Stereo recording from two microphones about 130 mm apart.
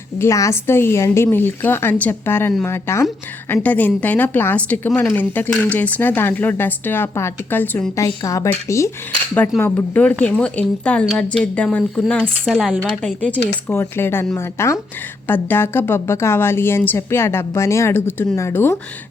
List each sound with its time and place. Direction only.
0.2 s speech: 25° left (ahead or behind); by 13.1 s 5° left (ahead or behind)
13.7 s speech: 15° left (ahead or behind)